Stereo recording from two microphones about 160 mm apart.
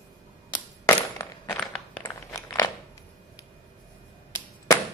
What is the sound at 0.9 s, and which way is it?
Coin, 20° left (ahead or behind).